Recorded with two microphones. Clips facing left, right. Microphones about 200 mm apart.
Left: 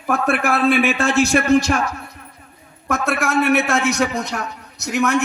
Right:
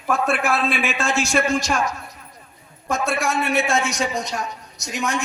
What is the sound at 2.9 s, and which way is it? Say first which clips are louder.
A man's voice: left 2 dB; 60° left (ahead or behind).